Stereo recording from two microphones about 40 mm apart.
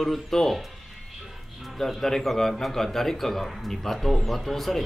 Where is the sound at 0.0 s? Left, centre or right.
Centre.